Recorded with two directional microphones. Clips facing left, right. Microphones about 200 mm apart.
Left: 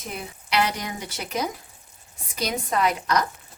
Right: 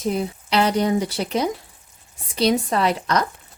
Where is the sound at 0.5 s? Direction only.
30° right (ahead or behind).